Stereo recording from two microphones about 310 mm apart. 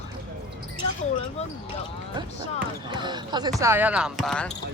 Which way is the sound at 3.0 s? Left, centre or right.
Centre.